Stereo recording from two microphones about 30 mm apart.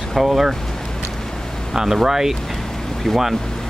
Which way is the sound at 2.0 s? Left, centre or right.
Centre.